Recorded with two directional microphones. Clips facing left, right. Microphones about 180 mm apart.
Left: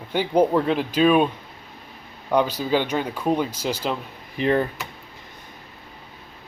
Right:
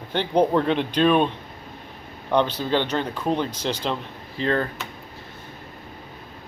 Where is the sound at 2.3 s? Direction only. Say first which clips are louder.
Left 1 dB; 10° left (ahead or behind).